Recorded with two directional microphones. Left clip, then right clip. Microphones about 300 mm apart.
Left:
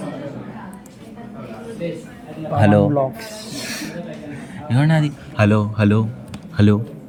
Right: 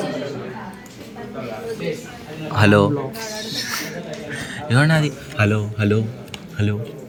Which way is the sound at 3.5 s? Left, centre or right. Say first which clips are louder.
Right 2 dB; left.